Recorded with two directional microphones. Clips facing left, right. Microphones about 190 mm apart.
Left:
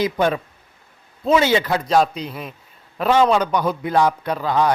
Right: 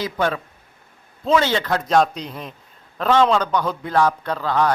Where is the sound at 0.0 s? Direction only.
15° left (ahead or behind).